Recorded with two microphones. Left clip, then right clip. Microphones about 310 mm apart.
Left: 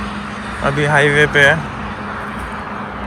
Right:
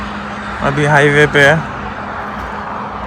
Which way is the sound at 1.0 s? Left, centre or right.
Right.